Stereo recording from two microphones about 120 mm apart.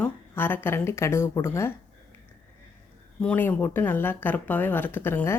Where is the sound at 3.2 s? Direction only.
15° left (ahead or behind).